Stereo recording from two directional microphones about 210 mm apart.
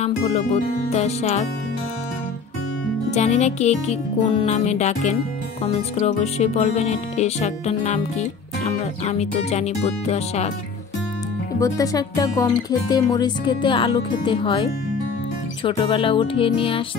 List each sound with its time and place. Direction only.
0.0 s speech: 30° left (ahead or behind)
3.1 s speech: 30° left (ahead or behind)
11.6 s music: 15° left (ahead or behind)